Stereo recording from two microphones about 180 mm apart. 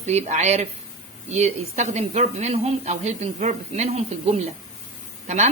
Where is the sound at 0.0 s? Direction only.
40° right (ahead or behind).